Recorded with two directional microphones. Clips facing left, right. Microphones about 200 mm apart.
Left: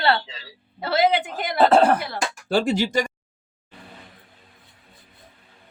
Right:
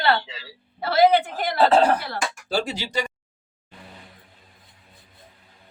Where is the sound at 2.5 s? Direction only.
55° left (ahead or behind).